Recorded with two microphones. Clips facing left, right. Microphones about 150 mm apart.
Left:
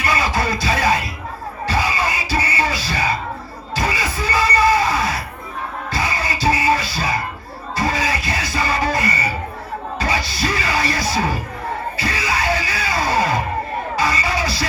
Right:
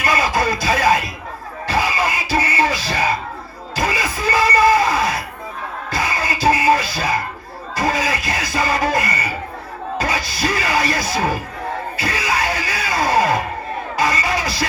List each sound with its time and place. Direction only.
0.0 s speech: 45° right (ahead or behind)
1.6 s music: 50° right (ahead or behind)
3.8 s a sound: 45° right (ahead or behind)
5.9 s music: 50° right (ahead or behind)
7.8 s a sound: 45° right (ahead or behind)
10.0 s speech: 45° right (ahead or behind)
11.9 s music: 50° right (ahead or behind)